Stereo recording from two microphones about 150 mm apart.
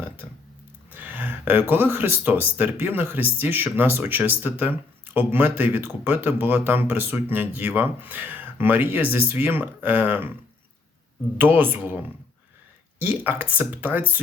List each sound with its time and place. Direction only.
0.9 s speech: 10° right (ahead or behind)
11.3 s speech: 15° right (ahead or behind)